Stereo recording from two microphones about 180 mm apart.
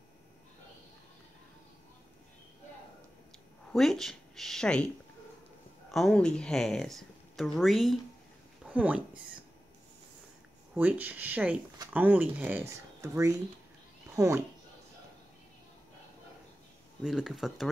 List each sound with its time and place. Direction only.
3.7 s speech: centre (ahead or behind)
5.9 s speech: centre (ahead or behind)
10.7 s speech: 10° right (ahead or behind)
17.0 s speech: centre (ahead or behind)